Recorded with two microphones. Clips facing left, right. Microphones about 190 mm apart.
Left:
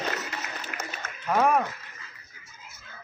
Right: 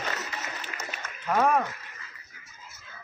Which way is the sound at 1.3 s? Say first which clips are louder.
Left 1 dB; 5° left (ahead or behind).